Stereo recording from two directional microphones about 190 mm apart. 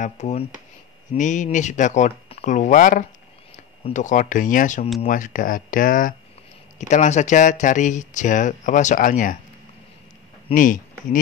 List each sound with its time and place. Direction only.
0.0 s speech: 40° left (ahead or behind)
10.5 s speech: 45° left (ahead or behind)